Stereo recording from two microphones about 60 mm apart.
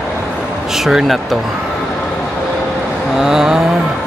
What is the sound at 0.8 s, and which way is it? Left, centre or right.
Speech, centre.